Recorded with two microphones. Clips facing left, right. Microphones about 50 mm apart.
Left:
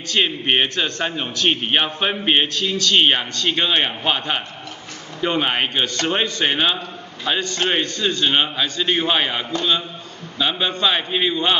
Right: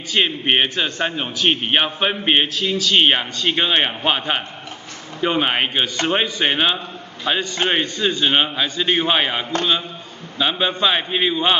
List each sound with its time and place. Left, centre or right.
0.1 s a man's voice: centre
10.4 s a man's voice: centre